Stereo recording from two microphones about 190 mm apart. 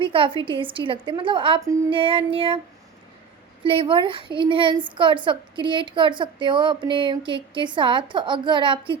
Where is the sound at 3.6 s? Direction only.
25° right (ahead or behind).